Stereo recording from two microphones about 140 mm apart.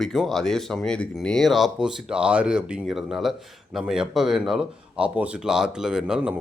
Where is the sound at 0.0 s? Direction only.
Centre (ahead or behind).